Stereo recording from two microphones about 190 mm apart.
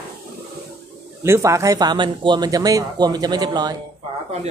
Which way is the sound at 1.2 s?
15° right (ahead or behind).